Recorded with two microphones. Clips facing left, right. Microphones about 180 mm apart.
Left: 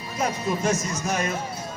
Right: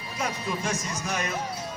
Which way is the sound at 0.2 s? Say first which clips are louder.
Left 5 dB; 45° left (ahead or behind).